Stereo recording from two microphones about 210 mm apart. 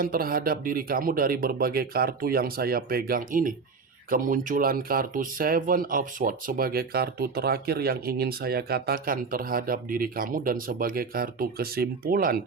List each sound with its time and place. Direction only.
0.0 s speech: 45° right (ahead or behind)